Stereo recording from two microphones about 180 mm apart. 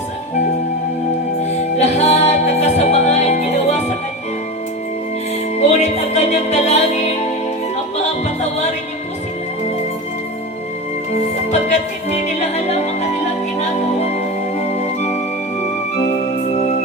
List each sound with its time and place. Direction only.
1.8 s music: 40° left (ahead or behind)
5.5 s music: 40° left (ahead or behind)
11.5 s music: 40° left (ahead or behind)